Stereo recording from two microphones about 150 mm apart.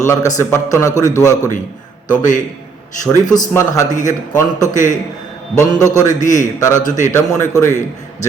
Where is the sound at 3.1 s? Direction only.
25° left (ahead or behind).